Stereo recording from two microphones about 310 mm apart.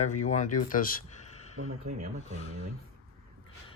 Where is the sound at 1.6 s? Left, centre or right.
Right.